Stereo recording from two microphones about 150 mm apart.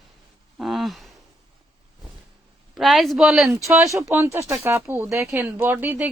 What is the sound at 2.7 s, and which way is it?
Speech, centre (ahead or behind).